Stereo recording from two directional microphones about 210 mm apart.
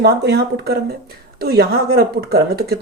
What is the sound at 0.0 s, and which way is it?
Speech, 50° right (ahead or behind).